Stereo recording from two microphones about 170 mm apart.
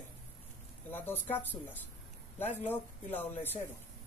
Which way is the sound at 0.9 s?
10° left (ahead or behind).